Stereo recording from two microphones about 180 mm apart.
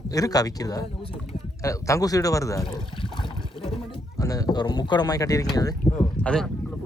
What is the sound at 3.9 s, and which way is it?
Speech, 20° left (ahead or behind).